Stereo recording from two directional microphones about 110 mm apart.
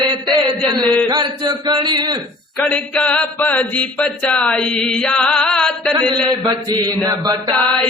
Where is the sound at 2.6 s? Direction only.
10° left (ahead or behind).